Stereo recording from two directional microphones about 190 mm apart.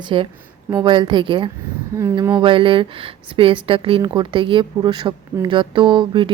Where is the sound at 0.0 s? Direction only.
25° right (ahead or behind).